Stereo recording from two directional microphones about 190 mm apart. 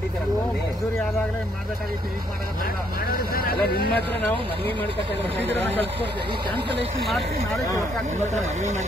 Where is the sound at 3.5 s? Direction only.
55° left (ahead or behind).